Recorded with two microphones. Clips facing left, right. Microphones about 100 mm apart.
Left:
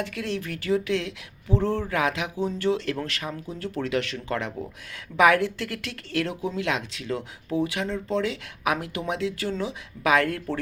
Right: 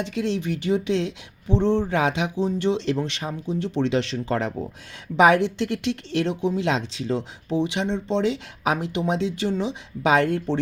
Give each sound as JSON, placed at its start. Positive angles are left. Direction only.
{"t": 0.0, "sound": "speech", "side_deg": -25}